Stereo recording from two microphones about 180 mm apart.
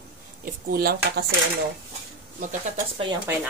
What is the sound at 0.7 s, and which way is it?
Speech, 60° right (ahead or behind).